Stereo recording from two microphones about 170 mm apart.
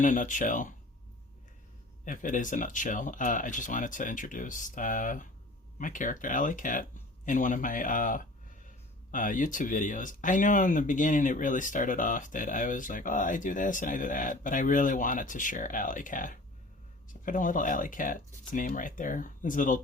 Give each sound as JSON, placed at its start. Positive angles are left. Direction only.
{"t": 0.0, "sound": "speech", "side_deg": 50}
{"t": 2.0, "sound": "speech", "side_deg": 50}